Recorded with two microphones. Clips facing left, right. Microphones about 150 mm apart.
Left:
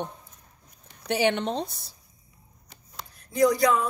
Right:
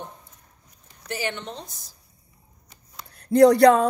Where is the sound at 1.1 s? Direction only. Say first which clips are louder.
Left 7 dB; 70° left (ahead or behind).